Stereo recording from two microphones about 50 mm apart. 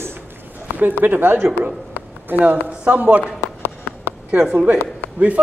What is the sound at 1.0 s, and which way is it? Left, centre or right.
Speech, right.